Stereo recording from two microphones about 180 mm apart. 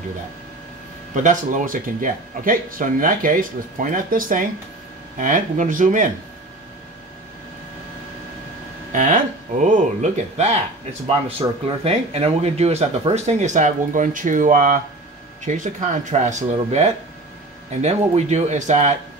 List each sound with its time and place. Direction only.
1.1 s speech: 45° right (ahead or behind)
8.9 s speech: 45° right (ahead or behind)